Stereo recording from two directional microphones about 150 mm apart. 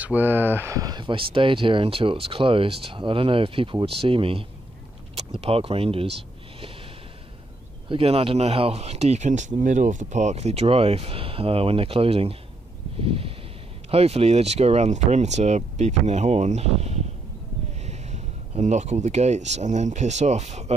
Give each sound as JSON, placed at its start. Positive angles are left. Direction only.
{"t": 0.0, "sound": "speech", "side_deg": -10}
{"t": 7.9, "sound": "speech", "side_deg": -40}